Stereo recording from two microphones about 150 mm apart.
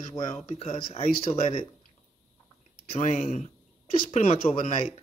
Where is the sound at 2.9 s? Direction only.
50° left (ahead or behind).